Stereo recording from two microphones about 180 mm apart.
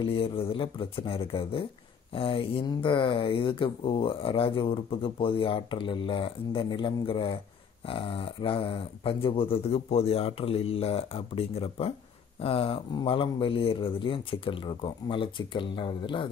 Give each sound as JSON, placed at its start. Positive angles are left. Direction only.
{"t": 0.0, "sound": "speech", "side_deg": 30}